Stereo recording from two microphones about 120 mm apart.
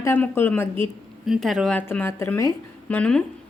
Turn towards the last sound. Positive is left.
turn(degrees=10)  # may be behind; listen again after turning